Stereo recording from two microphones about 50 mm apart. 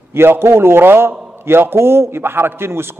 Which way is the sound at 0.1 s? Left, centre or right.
Right.